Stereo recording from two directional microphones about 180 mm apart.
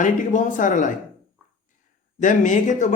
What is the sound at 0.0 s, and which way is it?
Speech, 45° left (ahead or behind).